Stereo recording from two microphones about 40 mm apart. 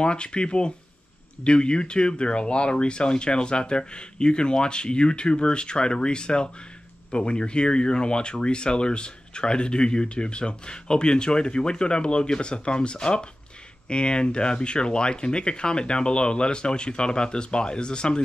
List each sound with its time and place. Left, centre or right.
0.0 s speech: left